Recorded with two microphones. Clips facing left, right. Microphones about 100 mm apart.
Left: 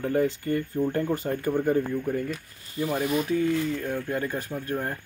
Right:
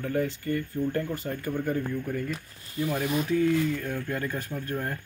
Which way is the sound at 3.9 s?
20° left (ahead or behind).